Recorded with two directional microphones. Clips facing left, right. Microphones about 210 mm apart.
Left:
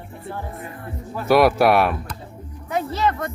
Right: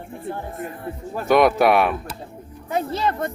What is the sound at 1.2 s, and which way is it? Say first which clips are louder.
Speech: even; centre (ahead or behind).